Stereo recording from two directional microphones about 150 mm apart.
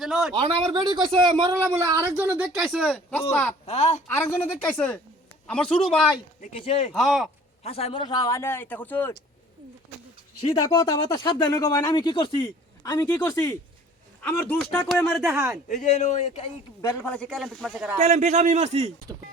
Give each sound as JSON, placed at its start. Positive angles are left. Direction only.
{"t": 0.0, "sound": "speech", "side_deg": 0}
{"t": 0.3, "sound": "speech", "side_deg": -35}
{"t": 2.5, "sound": "a man's voice", "side_deg": 0}
{"t": 3.7, "sound": "speech", "side_deg": 50}
{"t": 4.1, "sound": "a woman's voice", "side_deg": 15}
{"t": 6.5, "sound": "speech", "side_deg": 40}
{"t": 6.9, "sound": "a man's voice", "side_deg": 0}
{"t": 7.6, "sound": "speech", "side_deg": 40}
{"t": 10.4, "sound": "speech", "side_deg": 30}
{"t": 14.2, "sound": "a woman's voice", "side_deg": 10}
{"t": 15.2, "sound": "speech", "side_deg": -15}
{"t": 15.7, "sound": "speech", "side_deg": 50}
{"t": 16.8, "sound": "a man's voice", "side_deg": 10}
{"t": 18.0, "sound": "a man's voice", "side_deg": -50}